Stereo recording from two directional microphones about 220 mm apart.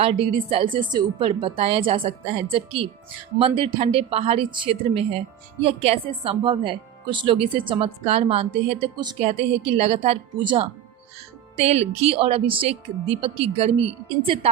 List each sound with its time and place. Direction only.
0.0 s speech: 25° right (ahead or behind)